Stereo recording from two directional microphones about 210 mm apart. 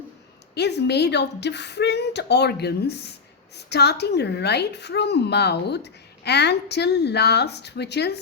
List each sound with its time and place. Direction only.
0.5 s a woman's voice: 50° left (ahead or behind)